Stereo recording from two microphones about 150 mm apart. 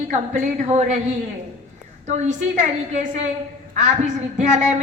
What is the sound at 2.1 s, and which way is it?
A woman's voice, 50° right (ahead or behind).